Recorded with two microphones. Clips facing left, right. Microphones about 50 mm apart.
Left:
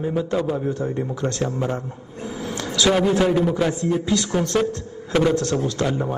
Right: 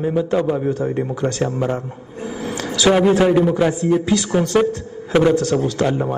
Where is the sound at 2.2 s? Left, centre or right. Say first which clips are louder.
Right 3 dB; centre.